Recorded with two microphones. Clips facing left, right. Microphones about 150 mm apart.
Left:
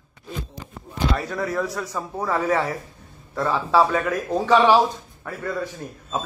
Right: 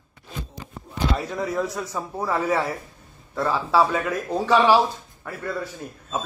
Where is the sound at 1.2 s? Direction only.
Centre (ahead or behind).